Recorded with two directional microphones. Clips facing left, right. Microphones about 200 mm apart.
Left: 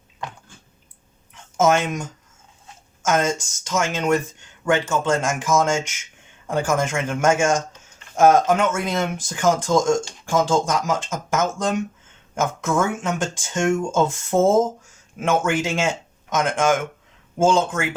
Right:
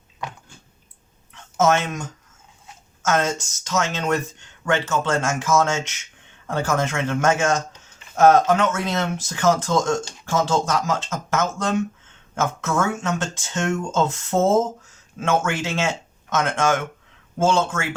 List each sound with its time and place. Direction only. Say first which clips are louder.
1.5 s speech: left 1 dB; 10° left (ahead or behind)